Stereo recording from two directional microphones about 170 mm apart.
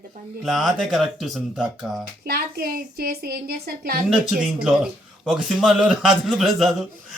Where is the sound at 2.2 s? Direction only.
65° right (ahead or behind).